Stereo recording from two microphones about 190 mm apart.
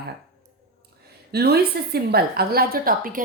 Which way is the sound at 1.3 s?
55° right (ahead or behind).